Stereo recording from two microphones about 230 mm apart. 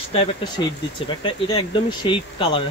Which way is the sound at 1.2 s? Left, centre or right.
Left.